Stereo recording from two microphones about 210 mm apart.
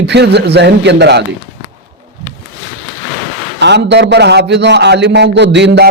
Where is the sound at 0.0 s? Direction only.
55° right (ahead or behind).